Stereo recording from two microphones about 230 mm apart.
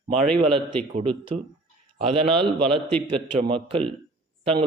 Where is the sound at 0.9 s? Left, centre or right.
Right.